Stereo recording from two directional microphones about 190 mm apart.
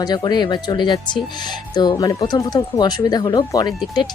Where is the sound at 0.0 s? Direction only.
20° left (ahead or behind).